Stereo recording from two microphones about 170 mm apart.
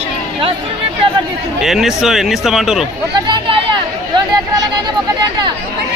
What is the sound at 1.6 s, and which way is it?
A man's voice, centre (ahead or behind).